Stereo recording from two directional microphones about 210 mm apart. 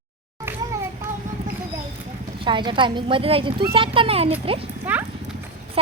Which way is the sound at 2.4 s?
20° right (ahead or behind).